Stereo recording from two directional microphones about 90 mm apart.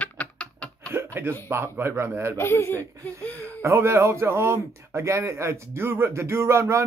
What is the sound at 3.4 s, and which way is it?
Speech, 30° right (ahead or behind).